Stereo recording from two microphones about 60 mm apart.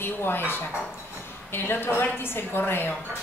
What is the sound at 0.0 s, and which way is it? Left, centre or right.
A woman's voice, left.